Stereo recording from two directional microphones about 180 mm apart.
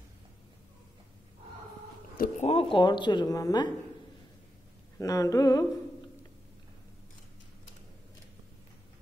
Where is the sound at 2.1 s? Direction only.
50° left (ahead or behind).